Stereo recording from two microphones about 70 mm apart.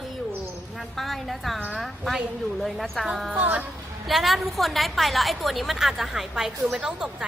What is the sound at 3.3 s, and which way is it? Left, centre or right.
Speech, right.